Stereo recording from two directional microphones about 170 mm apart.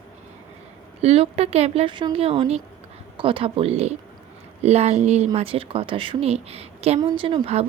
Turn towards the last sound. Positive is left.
turn(degrees=-35)  # may be behind; listen again after turning